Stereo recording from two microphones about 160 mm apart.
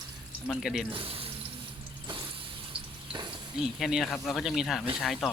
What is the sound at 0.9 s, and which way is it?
Speech, 35° right (ahead or behind).